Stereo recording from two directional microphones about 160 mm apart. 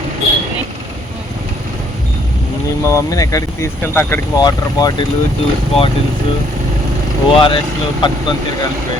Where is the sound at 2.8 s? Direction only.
20° left (ahead or behind).